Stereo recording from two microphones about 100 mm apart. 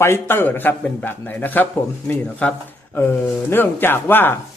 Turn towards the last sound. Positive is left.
turn(degrees=20)  # may be behind; listen again after turning